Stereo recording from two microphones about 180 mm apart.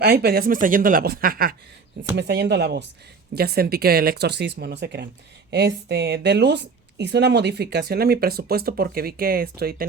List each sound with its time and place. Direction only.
0.0 s a woman's voice: 60° right (ahead or behind)
2.1 s speech: 70° right (ahead or behind)
3.3 s a woman's voice: 60° right (ahead or behind)